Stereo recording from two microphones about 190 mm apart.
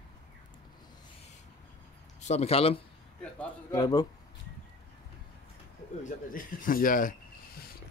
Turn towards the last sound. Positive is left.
turn(degrees=50)  # may be behind; listen again after turning